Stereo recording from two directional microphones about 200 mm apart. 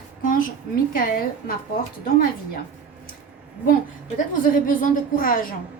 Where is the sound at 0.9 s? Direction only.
45° left (ahead or behind).